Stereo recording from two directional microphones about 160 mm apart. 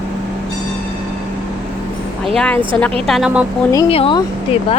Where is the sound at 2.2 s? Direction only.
5° left (ahead or behind).